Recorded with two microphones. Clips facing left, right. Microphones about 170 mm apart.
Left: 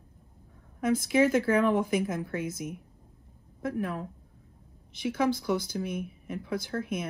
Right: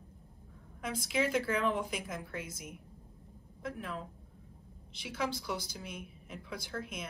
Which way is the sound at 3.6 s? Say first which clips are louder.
Left 9 dB; 50° left (ahead or behind).